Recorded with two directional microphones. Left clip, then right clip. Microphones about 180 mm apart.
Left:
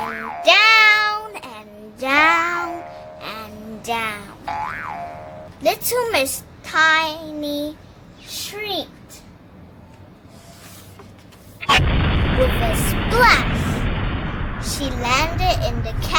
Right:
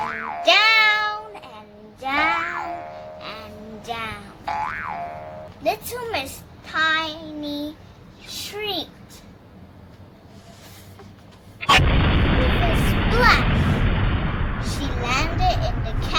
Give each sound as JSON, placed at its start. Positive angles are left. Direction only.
{"t": 0.0, "sound": "music", "side_deg": 0}
{"t": 0.4, "sound": "child singing", "side_deg": 40}
{"t": 2.4, "sound": "cat", "side_deg": 0}
{"t": 3.2, "sound": "music", "side_deg": 35}
{"t": 3.8, "sound": "a sound", "side_deg": 40}
{"t": 4.4, "sound": "boing", "side_deg": 0}
{"t": 5.6, "sound": "a woman's voice", "side_deg": 55}
{"t": 6.7, "sound": "child singing", "side_deg": 40}
{"t": 8.5, "sound": "a child's voice", "side_deg": 25}
{"t": 11.6, "sound": "artillery fire", "side_deg": 0}
{"t": 15.0, "sound": "a sound", "side_deg": 40}
{"t": 15.7, "sound": "a sound", "side_deg": 0}